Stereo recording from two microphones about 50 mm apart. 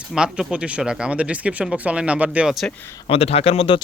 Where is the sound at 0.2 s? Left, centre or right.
Centre.